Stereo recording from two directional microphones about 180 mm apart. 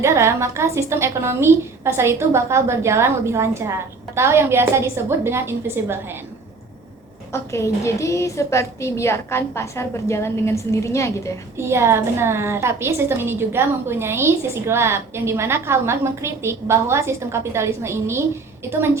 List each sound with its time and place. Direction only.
0.0 s a woman's voice: 15° right (ahead or behind)
7.3 s a woman's voice: 15° left (ahead or behind)
11.5 s a woman's voice: 15° right (ahead or behind)